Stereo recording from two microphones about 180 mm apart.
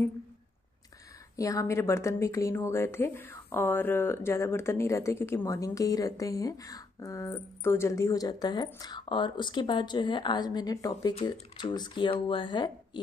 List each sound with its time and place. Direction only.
1.3 s speech: 20° left (ahead or behind)